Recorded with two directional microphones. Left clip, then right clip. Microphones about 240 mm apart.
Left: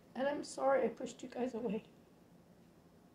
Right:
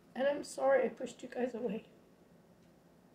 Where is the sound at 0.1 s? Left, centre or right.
Centre.